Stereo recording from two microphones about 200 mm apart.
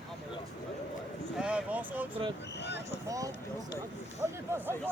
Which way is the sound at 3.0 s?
15° right (ahead or behind).